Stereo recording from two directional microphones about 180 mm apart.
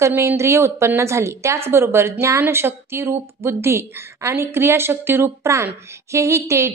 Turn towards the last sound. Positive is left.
turn(degrees=-15)  # may be behind; listen again after turning